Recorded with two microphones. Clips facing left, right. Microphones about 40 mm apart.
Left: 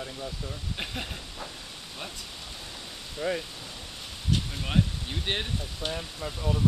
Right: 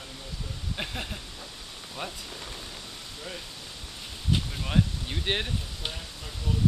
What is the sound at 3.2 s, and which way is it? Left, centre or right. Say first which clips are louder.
Speech: left 11 dB; left.